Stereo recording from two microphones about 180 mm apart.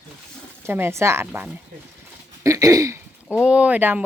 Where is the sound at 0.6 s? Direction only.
10° right (ahead or behind).